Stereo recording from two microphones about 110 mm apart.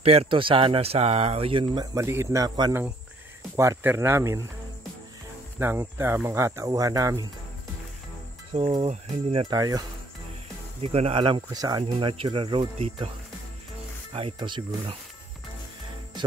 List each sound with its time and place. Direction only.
0.0 s speech: 65° right (ahead or behind)
2.0 s speech: 25° right (ahead or behind)
3.5 s speech: 25° right (ahead or behind)
5.6 s speech: 20° right (ahead or behind)
8.8 s speech: 65° right (ahead or behind)
9.5 s speech: 35° right (ahead or behind)
10.8 s speech: 70° right (ahead or behind); by 11.4 s 50° right (ahead or behind)
11.5 s speech: 35° right (ahead or behind)
11.8 s speech: 55° right (ahead or behind)
14.1 s speech: 50° right (ahead or behind)